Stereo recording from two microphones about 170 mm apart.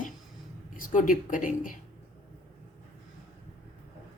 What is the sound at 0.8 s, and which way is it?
Speech, 50° left (ahead or behind).